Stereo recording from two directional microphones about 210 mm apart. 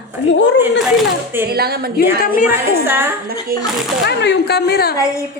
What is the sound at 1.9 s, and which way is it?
Speech, 45° left (ahead or behind).